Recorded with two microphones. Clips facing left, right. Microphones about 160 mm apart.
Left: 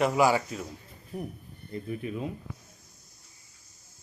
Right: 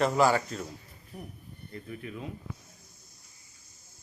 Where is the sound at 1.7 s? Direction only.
20° left (ahead or behind).